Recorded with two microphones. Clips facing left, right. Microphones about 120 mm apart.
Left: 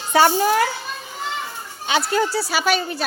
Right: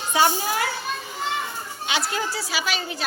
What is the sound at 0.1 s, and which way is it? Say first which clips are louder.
Speech: left 6 dB; 50° left (ahead or behind).